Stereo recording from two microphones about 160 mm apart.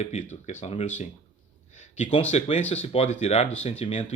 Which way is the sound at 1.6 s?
45° left (ahead or behind).